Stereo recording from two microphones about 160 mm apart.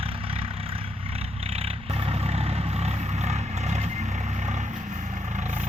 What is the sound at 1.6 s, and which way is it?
Vehicle, 40° right (ahead or behind).